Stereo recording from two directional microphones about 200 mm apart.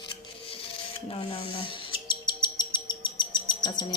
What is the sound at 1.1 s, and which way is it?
Owl, 25° left (ahead or behind).